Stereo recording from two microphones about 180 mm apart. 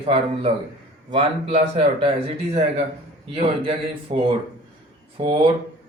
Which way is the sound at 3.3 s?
30° right (ahead or behind).